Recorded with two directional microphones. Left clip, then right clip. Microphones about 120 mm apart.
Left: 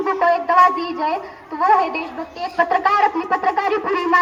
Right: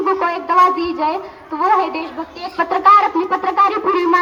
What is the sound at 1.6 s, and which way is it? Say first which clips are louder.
Speech: even; 40° left (ahead or behind).